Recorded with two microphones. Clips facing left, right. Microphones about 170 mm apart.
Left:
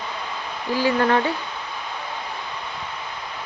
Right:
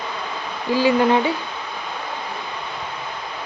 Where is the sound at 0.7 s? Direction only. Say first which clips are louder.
Right 3 dB; 15° right (ahead or behind).